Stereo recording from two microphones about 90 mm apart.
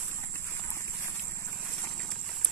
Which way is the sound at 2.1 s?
Centre (ahead or behind).